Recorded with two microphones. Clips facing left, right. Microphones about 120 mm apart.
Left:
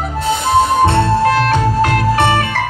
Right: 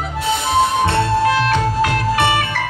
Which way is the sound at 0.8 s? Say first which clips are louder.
Left 3 dB; 45° left (ahead or behind).